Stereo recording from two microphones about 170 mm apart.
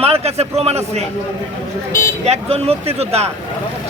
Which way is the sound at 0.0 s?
35° right (ahead or behind).